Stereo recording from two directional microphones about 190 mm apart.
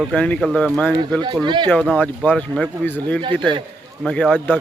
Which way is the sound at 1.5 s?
25° right (ahead or behind).